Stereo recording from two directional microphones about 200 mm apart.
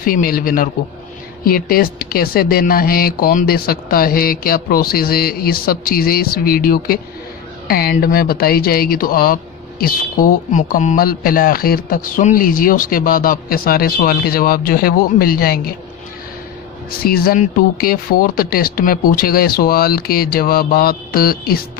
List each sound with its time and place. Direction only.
0.0 s speech: 45° left (ahead or behind)
17.0 s speech: 50° left (ahead or behind)